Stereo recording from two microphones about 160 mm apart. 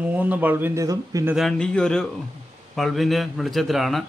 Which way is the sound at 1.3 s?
5° left (ahead or behind).